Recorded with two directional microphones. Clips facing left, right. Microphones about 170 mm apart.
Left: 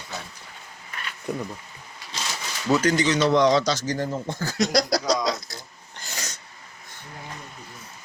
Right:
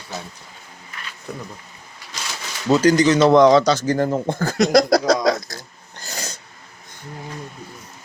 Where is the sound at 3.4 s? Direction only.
55° right (ahead or behind).